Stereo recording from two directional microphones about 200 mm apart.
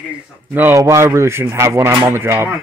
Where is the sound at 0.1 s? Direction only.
10° right (ahead or behind).